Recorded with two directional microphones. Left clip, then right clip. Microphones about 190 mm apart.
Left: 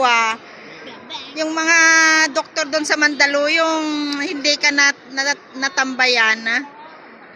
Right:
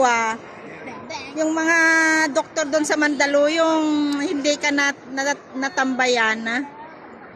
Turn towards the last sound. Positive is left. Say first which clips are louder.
# left 4 dB
turn(degrees=-20)  # may be behind; listen again after turning